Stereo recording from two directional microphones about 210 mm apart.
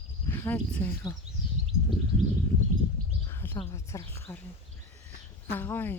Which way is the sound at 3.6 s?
15° left (ahead or behind).